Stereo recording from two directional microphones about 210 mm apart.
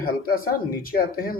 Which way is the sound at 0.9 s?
45° left (ahead or behind).